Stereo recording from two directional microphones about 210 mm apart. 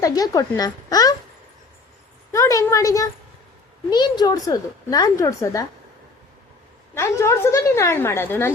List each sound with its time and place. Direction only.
0.0 s a woman's voice: 15° left (ahead or behind)
2.3 s a woman's voice: 15° left (ahead or behind)
6.9 s a woman's voice: 15° left (ahead or behind)